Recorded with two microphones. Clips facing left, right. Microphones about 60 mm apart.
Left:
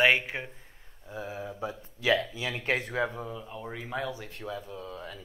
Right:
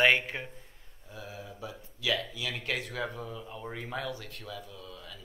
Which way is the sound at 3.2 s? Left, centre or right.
Centre.